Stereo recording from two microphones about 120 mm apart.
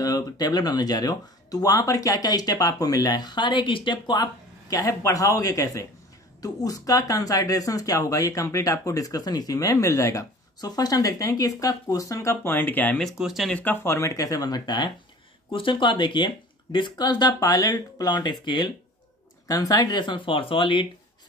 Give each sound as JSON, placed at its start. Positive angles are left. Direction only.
{"t": 0.0, "sound": "speech", "side_deg": 35}
{"t": 13.0, "sound": "speech", "side_deg": 0}
{"t": 13.6, "sound": "speech", "side_deg": 15}